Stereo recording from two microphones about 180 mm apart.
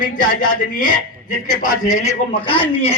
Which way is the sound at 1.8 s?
40° left (ahead or behind).